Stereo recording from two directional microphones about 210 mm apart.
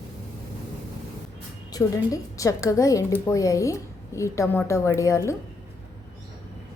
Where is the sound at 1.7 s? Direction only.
20° left (ahead or behind).